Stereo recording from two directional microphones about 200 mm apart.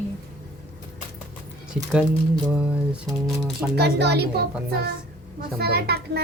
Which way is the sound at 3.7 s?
55° right (ahead or behind).